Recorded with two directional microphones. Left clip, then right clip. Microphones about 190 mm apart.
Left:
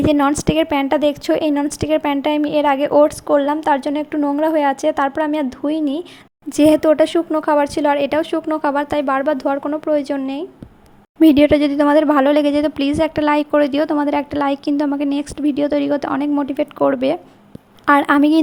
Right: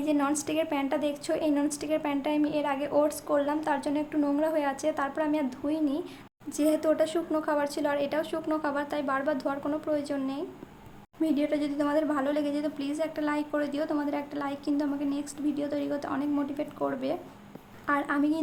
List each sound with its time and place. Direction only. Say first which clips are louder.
0.0 s speech: left 13 dB; 40° left (ahead or behind)
17.8 s a woman's voice: left 15 dB; 50° left (ahead or behind)